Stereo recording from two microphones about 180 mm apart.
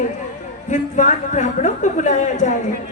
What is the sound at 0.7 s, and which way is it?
A man's voice, 45° left (ahead or behind).